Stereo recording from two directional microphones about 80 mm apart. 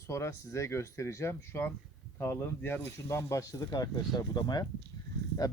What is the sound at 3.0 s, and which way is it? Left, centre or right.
Speech, left.